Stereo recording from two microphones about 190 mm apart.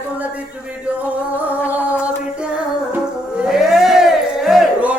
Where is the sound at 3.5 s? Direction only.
Centre (ahead or behind).